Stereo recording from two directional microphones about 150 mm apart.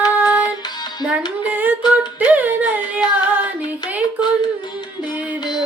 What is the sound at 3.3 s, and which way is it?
Child singing, 10° right (ahead or behind).